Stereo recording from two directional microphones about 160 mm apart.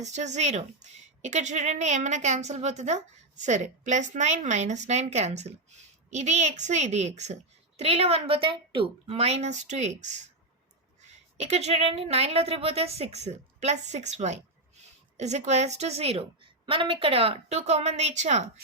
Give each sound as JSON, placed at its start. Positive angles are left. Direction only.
{"t": 0.0, "sound": "a woman's voice", "side_deg": -45}
{"t": 11.3, "sound": "a woman's voice", "side_deg": -45}